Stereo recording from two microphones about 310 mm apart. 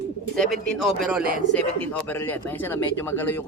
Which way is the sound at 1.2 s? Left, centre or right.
Right.